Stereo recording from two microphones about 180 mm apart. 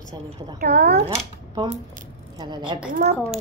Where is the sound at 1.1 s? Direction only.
35° right (ahead or behind).